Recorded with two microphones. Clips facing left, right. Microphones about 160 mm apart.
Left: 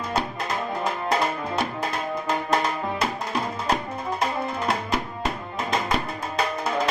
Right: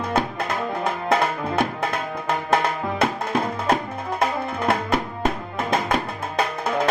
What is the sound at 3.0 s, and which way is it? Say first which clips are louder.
Music: right 4 dB; 55° right (ahead or behind).